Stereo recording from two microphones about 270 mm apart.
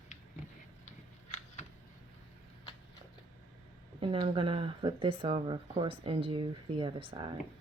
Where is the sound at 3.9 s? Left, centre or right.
Centre.